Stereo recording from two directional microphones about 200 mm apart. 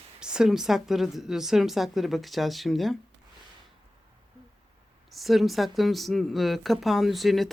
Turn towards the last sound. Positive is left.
turn(degrees=0)  # may be behind; listen again after turning